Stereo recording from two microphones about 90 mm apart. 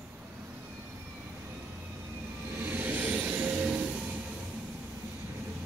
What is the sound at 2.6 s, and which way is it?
Vehicle, 20° right (ahead or behind).